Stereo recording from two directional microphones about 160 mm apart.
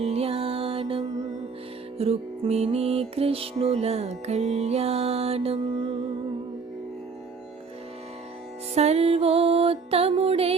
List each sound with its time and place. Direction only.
0.0 s music: 40° right (ahead or behind)
8.7 s music: 40° right (ahead or behind)